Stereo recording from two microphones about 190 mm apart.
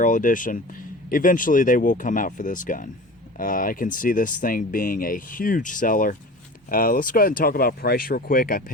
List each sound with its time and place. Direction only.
0.0 s speech: 45° left (ahead or behind)